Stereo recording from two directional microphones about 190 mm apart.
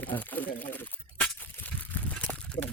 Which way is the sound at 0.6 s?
10° left (ahead or behind).